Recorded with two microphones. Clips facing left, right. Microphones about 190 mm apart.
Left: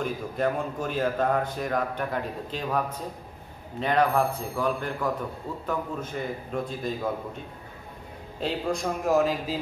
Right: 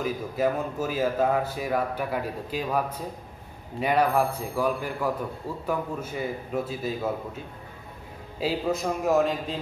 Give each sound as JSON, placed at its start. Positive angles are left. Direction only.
{"t": 0.0, "sound": "a man's voice", "side_deg": -5}
{"t": 8.4, "sound": "a man's voice", "side_deg": -5}